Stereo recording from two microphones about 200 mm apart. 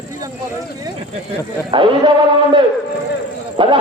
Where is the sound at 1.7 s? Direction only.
25° right (ahead or behind).